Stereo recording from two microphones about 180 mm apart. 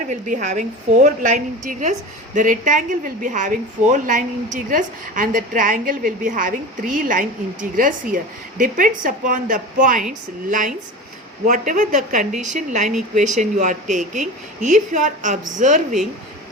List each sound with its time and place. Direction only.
0.1 s a woman's voice: 45° right (ahead or behind)
11.4 s a woman's voice: 45° right (ahead or behind)